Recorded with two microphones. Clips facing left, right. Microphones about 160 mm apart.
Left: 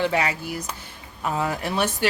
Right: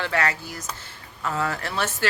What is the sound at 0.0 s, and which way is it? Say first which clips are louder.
Speech: left 2 dB; 15° left (ahead or behind).